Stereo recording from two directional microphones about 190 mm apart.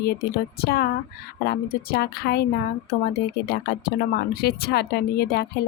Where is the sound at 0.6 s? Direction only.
55° left (ahead or behind).